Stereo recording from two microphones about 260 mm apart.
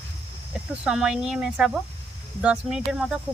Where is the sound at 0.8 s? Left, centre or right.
Centre.